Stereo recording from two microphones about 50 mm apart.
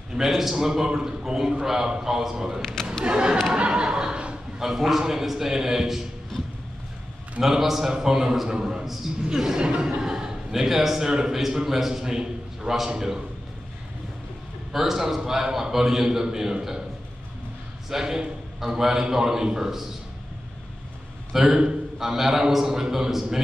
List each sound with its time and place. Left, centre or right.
0.1 s a man's voice: centre
2.6 s speech: centre
3.1 s speech: centre
3.5 s a sound: right
4.6 s a man's voice: centre
7.3 s a man's voice: centre
14.7 s a man's voice: centre
17.8 s a man's voice: centre
21.3 s a man's voice: centre